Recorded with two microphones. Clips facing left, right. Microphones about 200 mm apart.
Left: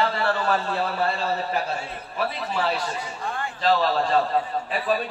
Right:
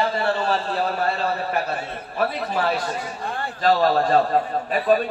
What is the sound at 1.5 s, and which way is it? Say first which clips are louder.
A man's voice: right 2 dB; 60° right (ahead or behind).